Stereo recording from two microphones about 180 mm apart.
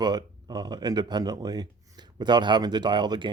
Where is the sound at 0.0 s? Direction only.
25° right (ahead or behind).